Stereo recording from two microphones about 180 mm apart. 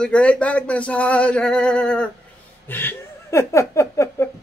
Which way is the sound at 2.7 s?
10° left (ahead or behind).